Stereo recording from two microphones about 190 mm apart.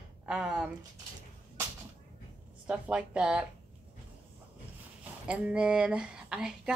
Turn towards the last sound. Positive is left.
turn(degrees=-5)  # may be behind; listen again after turning